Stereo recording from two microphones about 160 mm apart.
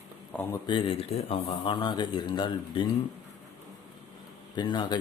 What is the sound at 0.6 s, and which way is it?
Speech, 30° left (ahead or behind).